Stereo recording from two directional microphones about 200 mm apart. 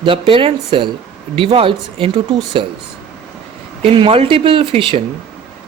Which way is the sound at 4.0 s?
25° right (ahead or behind).